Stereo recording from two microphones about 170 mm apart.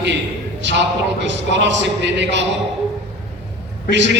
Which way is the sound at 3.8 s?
90° right.